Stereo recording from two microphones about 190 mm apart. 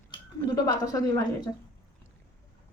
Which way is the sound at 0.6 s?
20° left (ahead or behind).